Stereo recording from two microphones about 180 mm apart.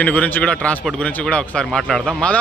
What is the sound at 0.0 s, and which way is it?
A man's voice, 10° left (ahead or behind).